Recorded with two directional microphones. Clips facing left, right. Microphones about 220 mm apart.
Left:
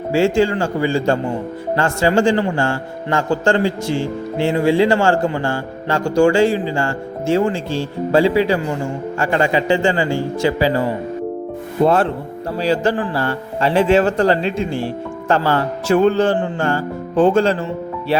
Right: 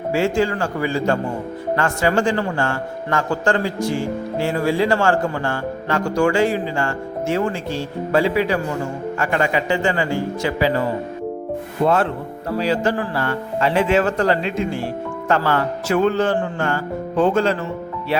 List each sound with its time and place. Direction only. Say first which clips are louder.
0.1 s a man's voice: left 4 dB; 30° left (ahead or behind)
12.5 s speech: left 2 dB; 30° left (ahead or behind)